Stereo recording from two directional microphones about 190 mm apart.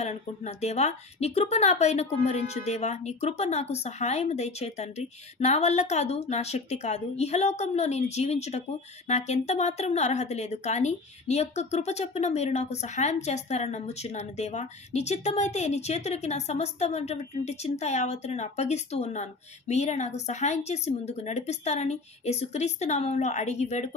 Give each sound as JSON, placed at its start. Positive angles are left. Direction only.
{"t": 0.0, "sound": "speech", "side_deg": 35}